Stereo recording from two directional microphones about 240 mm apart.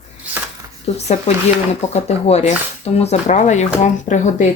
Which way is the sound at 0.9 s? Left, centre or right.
Left.